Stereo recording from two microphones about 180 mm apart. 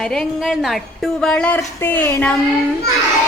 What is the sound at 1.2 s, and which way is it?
Speech, 5° left (ahead or behind).